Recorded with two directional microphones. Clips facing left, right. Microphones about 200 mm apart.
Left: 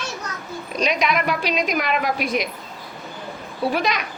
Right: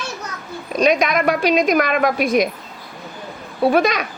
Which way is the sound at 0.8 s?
45° right (ahead or behind).